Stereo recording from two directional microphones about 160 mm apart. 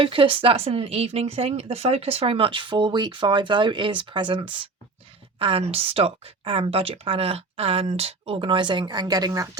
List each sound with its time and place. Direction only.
0.0 s speech: 35° right (ahead or behind)